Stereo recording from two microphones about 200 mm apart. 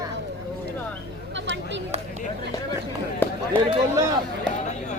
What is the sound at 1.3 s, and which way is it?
Chatter, 60° right (ahead or behind).